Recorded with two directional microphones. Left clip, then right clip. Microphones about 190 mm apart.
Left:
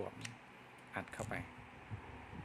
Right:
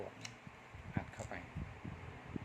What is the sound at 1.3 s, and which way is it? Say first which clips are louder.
Speech: left 4 dB; 30° left (ahead or behind).